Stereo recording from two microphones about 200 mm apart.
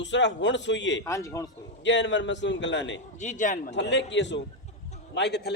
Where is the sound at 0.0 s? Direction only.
65° left (ahead or behind).